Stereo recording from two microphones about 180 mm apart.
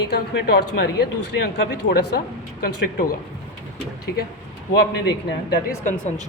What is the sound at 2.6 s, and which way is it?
Speech, 55° left (ahead or behind).